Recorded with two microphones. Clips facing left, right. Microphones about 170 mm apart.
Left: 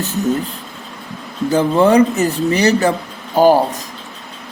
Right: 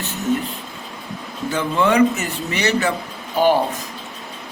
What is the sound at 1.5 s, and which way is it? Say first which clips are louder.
Speech: left 6 dB; 35° left (ahead or behind).